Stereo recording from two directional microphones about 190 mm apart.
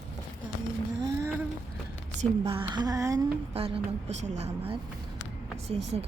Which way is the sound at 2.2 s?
30° right (ahead or behind).